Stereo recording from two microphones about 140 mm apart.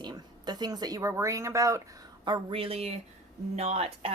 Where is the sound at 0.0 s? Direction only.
30° right (ahead or behind).